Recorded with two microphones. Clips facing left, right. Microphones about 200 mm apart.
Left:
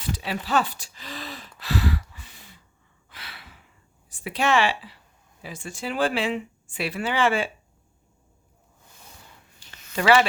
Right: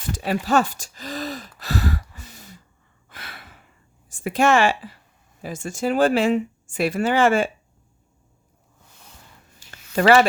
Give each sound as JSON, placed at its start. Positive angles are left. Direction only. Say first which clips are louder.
{"t": 0.1, "sound": "a sound", "louder": "right 5 dB", "side_deg": -45}
{"t": 4.1, "sound": "speech", "louder": "right 5 dB", "side_deg": -45}
{"t": 9.9, "sound": "speech", "louder": "right 4 dB", "side_deg": -45}